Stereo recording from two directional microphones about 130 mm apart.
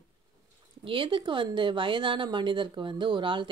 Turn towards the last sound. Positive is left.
turn(degrees=-40)  # may be behind; listen again after turning